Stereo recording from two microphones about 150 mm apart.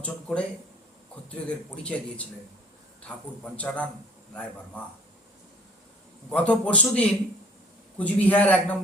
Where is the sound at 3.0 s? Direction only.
10° left (ahead or behind).